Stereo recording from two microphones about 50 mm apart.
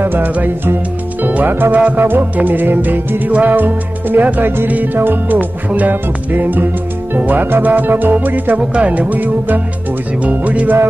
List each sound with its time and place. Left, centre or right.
0.0 s music: right
1.2 s speech: right
2.0 s music: right
8.7 s music: right